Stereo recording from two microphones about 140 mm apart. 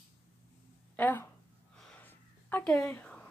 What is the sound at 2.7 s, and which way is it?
Speech, 10° left (ahead or behind).